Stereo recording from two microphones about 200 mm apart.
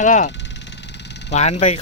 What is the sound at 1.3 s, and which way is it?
Speech, 35° left (ahead or behind).